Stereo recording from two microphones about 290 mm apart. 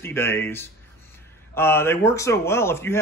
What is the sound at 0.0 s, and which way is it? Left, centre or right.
Speech, centre.